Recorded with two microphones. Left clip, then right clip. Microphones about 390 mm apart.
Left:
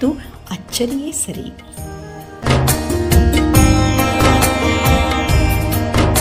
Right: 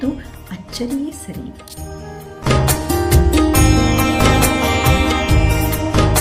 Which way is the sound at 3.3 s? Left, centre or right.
Centre.